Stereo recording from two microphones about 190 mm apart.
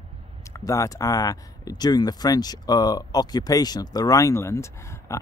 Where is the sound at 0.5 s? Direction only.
15° left (ahead or behind).